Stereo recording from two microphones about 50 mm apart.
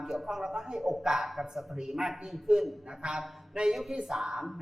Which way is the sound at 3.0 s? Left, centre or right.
Centre.